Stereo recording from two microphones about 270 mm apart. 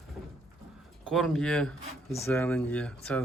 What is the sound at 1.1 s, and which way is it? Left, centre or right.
Speech, centre.